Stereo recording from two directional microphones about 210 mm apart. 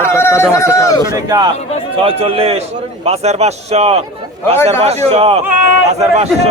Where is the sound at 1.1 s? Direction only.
15° right (ahead or behind).